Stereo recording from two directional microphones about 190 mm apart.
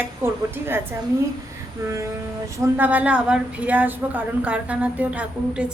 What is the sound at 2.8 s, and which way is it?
A woman's voice, 10° right (ahead or behind).